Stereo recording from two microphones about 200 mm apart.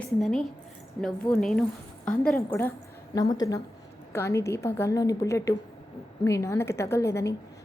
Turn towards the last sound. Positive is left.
turn(degrees=15)  # may be behind; listen again after turning